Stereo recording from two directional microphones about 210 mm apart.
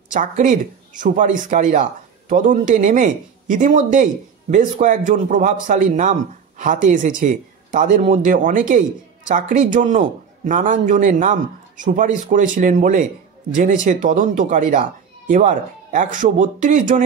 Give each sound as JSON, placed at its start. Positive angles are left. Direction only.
{"t": 0.1, "sound": "speech", "side_deg": -40}